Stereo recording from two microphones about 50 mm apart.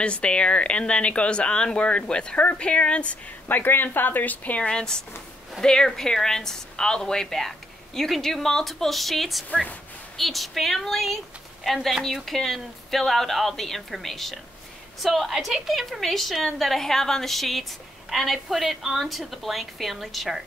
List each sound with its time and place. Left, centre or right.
0.0 s speech: left
3.4 s speech: left
4.6 s a woman's voice: centre